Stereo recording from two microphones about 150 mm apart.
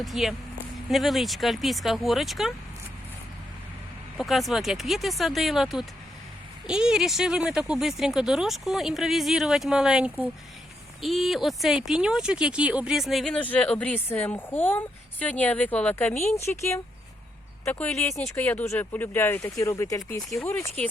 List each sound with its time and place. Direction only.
0.0 s speech: centre (ahead or behind)
4.2 s speech: centre (ahead or behind); by 20.0 s 20° left (ahead or behind)